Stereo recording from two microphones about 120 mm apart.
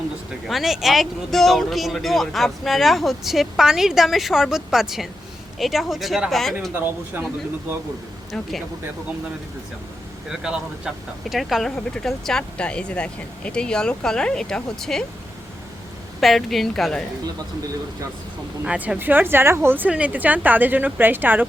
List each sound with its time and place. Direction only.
0.4 s speech: centre (ahead or behind)
6.7 s speech: 15° right (ahead or behind)
8.3 s speech: centre (ahead or behind)
10.2 s speech: 5° right (ahead or behind)
16.2 s speech: centre (ahead or behind)
18.6 s speech: 10° right (ahead or behind)